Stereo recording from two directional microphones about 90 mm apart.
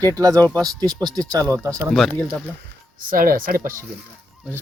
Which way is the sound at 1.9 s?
5° left (ahead or behind).